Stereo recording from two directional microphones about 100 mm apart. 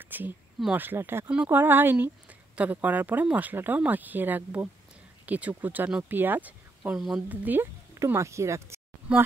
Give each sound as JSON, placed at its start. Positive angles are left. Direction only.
{"t": 0.0, "sound": "a sound", "side_deg": -20}
{"t": 0.7, "sound": "speech", "side_deg": -20}
{"t": 8.0, "sound": "speech", "side_deg": -30}
{"t": 9.1, "sound": "speech", "side_deg": -15}